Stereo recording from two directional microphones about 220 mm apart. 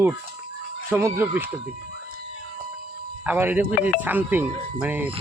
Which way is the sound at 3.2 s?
10° right (ahead or behind).